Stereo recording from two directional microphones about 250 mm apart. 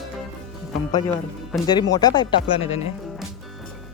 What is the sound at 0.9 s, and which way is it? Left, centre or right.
Speech, centre.